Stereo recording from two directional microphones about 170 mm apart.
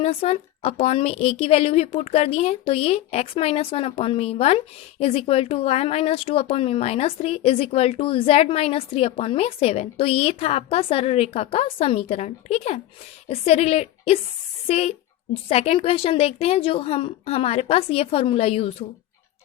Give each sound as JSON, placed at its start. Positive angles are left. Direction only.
{"t": 0.0, "sound": "a woman's voice", "side_deg": 35}